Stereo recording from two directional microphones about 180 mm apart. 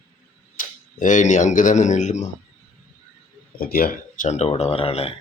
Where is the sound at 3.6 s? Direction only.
55° left (ahead or behind).